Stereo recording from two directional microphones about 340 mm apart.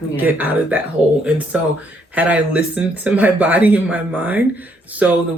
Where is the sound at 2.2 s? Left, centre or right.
Centre.